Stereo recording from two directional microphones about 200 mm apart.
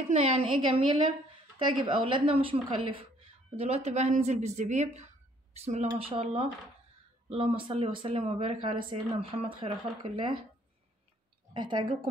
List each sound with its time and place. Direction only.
0.1 s a woman's voice: 35° right (ahead or behind)
11.5 s speech: 25° right (ahead or behind)